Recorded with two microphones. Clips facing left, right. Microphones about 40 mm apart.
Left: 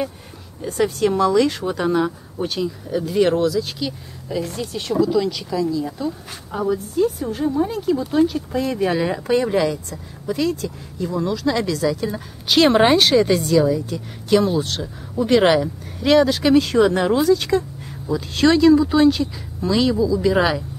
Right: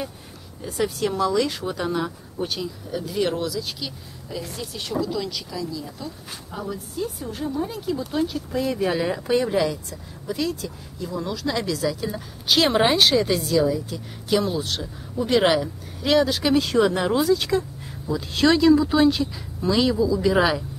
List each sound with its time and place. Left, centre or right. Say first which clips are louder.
0.7 s speech: left 5 dB; centre; by 7.7 s left
8.1 s speech: left 7 dB; centre